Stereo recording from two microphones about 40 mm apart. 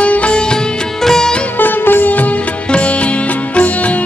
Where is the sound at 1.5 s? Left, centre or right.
Left.